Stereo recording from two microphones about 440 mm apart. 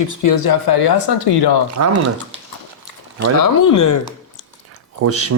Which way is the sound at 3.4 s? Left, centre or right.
Left.